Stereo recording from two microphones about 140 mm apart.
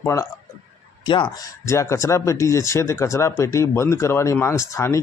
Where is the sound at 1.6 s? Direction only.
20° left (ahead or behind).